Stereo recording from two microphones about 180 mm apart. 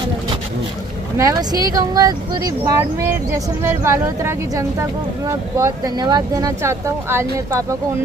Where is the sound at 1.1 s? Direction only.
20° right (ahead or behind).